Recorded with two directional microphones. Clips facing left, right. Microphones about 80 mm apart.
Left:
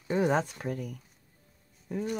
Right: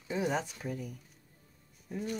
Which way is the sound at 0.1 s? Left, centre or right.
Left.